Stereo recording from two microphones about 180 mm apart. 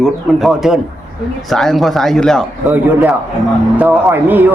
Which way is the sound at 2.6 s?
10° right (ahead or behind).